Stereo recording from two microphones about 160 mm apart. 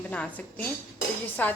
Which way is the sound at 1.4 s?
10° left (ahead or behind).